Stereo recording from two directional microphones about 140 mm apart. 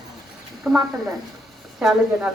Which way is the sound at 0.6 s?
Centre (ahead or behind).